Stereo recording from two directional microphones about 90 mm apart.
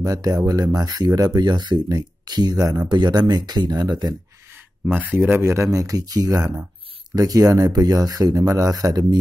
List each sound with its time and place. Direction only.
0.0 s speech: 40° right (ahead or behind)
4.8 s speech: 25° right (ahead or behind); by 9.2 s 45° right (ahead or behind)